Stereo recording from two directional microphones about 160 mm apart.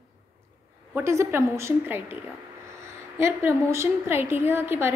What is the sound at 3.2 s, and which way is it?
A woman's voice, 15° right (ahead or behind).